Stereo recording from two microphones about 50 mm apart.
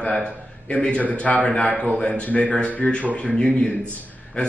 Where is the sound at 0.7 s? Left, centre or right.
Left.